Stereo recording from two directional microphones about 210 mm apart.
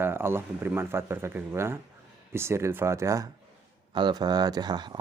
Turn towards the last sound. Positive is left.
turn(degrees=-20)  # may be behind; listen again after turning